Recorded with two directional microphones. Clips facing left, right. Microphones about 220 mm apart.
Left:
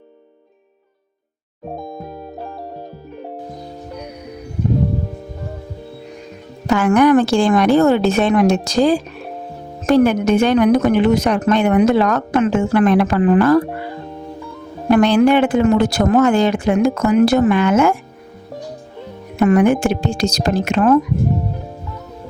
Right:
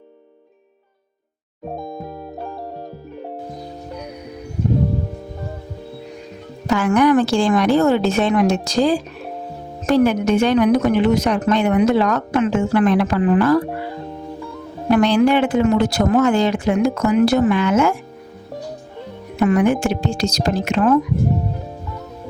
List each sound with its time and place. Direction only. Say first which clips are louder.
1.7 s music: even; centre (ahead or behind)
6.7 s speech: left 3 dB; 55° left (ahead or behind)
14.8 s speech: left 2 dB; 55° left (ahead or behind)
19.4 s speech: left 3 dB; 50° left (ahead or behind)